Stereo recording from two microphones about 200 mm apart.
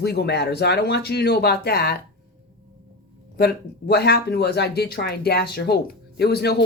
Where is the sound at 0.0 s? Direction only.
55° left (ahead or behind).